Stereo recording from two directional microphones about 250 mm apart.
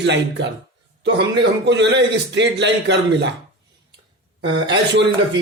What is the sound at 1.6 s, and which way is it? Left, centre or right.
A man's voice, right.